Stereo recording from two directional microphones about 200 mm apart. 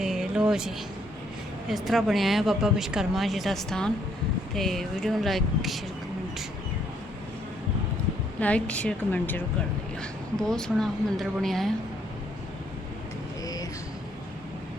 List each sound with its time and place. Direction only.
0.0 s a sound: centre (ahead or behind)
1.6 s a woman's voice: centre (ahead or behind)
8.4 s a woman's voice: 5° left (ahead or behind)
13.4 s vehicle: 20° left (ahead or behind)